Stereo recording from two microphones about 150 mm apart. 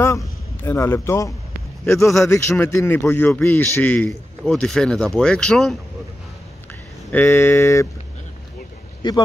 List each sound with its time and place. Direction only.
0.0 s a man's voice: 20° left (ahead or behind)
2.0 s a man's voice: centre (ahead or behind)
2.3 s a man's voice: 15° left (ahead or behind)
7.1 s speech: 15° left (ahead or behind)
9.0 s speech: 30° left (ahead or behind)